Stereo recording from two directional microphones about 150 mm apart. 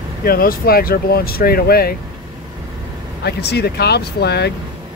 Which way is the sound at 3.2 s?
90° left.